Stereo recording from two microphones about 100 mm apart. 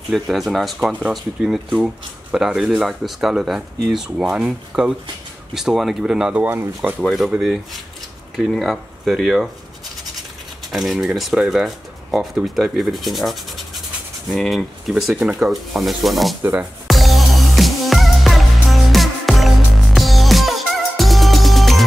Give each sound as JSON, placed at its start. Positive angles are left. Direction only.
{"t": 0.1, "sound": "speech", "side_deg": 0}
{"t": 6.4, "sound": "speech", "side_deg": -20}
{"t": 7.1, "sound": "speech", "side_deg": -5}
{"t": 10.7, "sound": "speech", "side_deg": 0}
{"t": 16.8, "sound": "music", "side_deg": 0}